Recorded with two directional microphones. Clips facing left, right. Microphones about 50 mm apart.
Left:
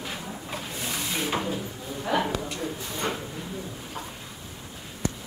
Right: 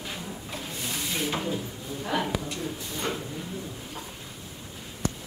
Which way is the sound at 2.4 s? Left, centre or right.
Centre.